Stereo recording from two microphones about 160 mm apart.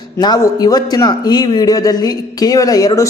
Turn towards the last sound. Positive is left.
turn(degrees=20)  # may be behind; listen again after turning